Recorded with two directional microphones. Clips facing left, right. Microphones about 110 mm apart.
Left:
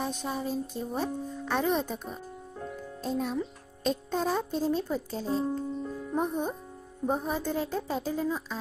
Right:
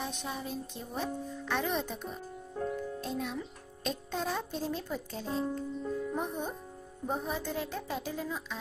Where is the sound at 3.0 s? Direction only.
40° left (ahead or behind).